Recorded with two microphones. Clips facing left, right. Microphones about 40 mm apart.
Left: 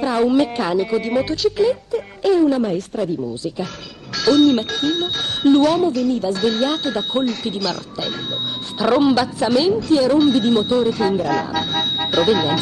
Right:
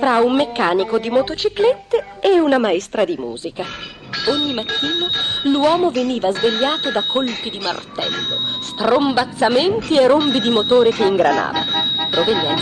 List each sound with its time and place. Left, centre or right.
0.3 s speech: right
0.8 s speech: right
1.1 s speech: right
4.2 s speech: centre
4.6 s speech: right
5.4 s speech: right
5.9 s speech: right
9.0 s speech: centre
9.4 s speech: right
9.8 s speech: right
12.0 s music: centre